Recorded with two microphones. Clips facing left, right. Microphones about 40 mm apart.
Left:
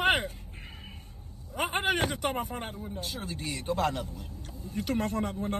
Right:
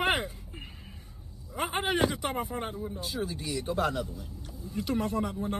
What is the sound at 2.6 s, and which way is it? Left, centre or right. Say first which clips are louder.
Speech: right 3 dB; centre.